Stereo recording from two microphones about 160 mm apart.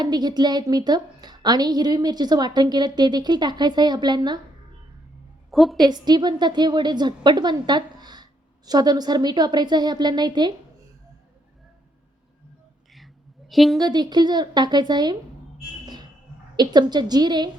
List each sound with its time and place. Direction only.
0.0 s a woman's voice: 25° right (ahead or behind)
5.5 s a woman's voice: centre (ahead or behind)
5.8 s a woman's voice: 25° right (ahead or behind)
13.5 s a woman's voice: centre (ahead or behind)
13.7 s a woman's voice: 25° right (ahead or behind)
16.6 s a woman's voice: 25° right (ahead or behind)